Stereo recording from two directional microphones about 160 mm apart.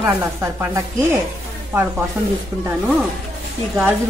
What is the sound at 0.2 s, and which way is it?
Speech, 20° right (ahead or behind).